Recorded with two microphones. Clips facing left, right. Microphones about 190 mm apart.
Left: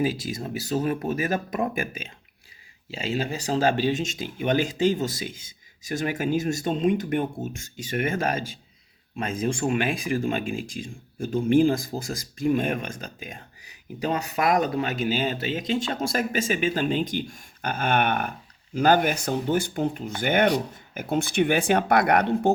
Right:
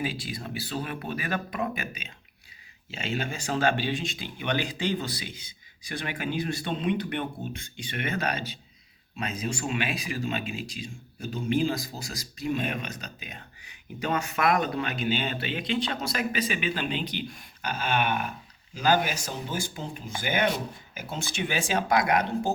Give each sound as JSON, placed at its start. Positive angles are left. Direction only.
{"t": 0.0, "sound": "speech", "side_deg": 40}
{"t": 2.9, "sound": "speech", "side_deg": 35}